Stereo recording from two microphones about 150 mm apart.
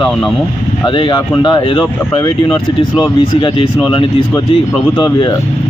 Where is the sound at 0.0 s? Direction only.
Centre (ahead or behind).